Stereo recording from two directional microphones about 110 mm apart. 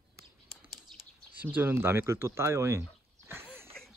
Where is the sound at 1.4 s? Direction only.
15° right (ahead or behind).